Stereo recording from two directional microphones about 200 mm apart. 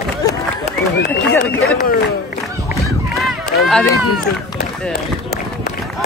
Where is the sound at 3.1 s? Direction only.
Centre (ahead or behind).